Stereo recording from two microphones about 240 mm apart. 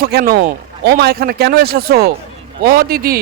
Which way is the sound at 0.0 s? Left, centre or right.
Right.